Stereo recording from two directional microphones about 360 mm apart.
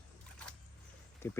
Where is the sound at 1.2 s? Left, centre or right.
Centre.